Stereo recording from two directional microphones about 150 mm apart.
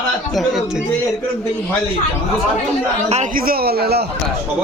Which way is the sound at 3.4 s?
90° right.